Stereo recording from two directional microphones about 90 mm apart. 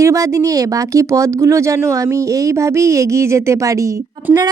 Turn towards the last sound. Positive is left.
turn(degrees=-15)  # may be behind; listen again after turning